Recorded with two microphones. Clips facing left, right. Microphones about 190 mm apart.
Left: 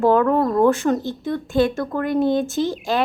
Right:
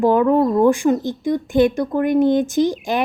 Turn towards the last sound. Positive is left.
turn(degrees=-15)  # may be behind; listen again after turning